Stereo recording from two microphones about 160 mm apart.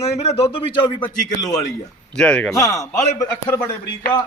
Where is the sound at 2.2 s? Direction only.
5° left (ahead or behind).